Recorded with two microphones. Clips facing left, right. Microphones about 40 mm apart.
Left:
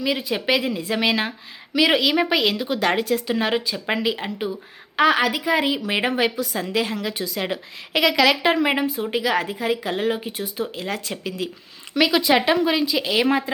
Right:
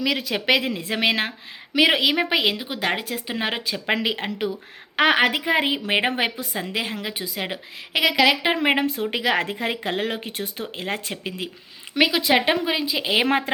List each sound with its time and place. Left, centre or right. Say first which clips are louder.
0.0 s a woman's voice: even; right
2.7 s a woman's voice: left 5 dB; centre
3.2 s a woman's voice: left 4 dB; right
3.5 s a woman's voice: left 1 dB; right
6.4 s a woman's voice: left 4 dB; right
8.5 s a woman's voice: even; right
8.8 s a woman's voice: left 1 dB; right
10.8 s a woman's voice: left 1 dB; right
12.1 s speech: left 4 dB; centre
12.6 s a woman's voice: left 3 dB; centre
13.2 s a woman's voice: left 1 dB; right